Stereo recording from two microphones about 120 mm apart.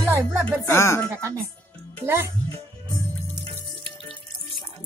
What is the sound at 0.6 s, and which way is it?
Speech, 20° left (ahead or behind).